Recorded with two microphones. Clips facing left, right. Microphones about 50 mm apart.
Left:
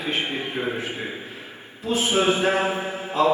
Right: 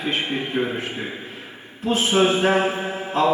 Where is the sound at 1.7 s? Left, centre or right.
Right.